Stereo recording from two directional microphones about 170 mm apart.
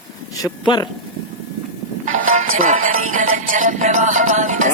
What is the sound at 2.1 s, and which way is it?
Music, 50° right (ahead or behind).